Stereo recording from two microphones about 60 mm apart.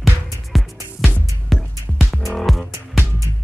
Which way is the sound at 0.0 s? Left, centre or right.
Centre.